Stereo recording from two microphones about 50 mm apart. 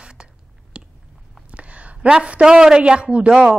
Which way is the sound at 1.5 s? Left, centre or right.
Right.